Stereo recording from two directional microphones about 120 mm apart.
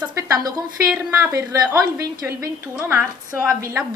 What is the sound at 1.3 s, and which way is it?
A woman's voice, 25° right (ahead or behind).